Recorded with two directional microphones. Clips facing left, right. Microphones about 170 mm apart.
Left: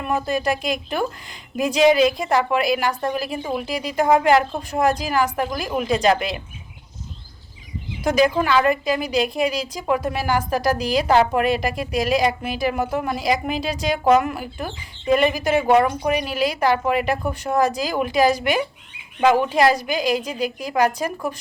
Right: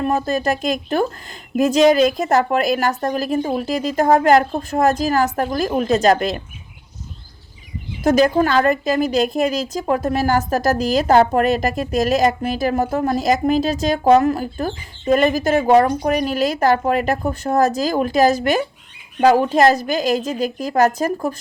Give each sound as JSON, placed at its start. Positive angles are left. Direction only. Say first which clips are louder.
{"t": 0.0, "sound": "speech", "louder": "right 3 dB", "side_deg": -40}
{"t": 8.0, "sound": "speech", "louder": "right 4 dB", "side_deg": -45}